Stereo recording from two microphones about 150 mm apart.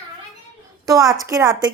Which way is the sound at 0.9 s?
25° right (ahead or behind).